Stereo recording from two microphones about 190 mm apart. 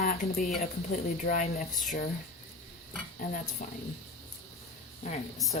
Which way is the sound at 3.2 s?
45° left (ahead or behind).